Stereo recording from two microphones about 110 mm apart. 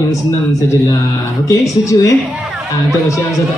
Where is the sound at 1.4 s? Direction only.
30° left (ahead or behind).